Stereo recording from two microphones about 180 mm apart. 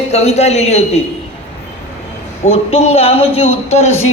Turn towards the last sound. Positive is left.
turn(degrees=40)  # may be behind; listen again after turning